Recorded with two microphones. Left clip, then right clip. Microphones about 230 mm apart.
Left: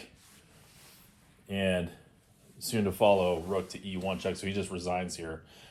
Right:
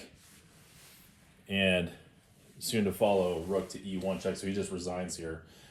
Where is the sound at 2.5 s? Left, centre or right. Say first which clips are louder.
Even; centre.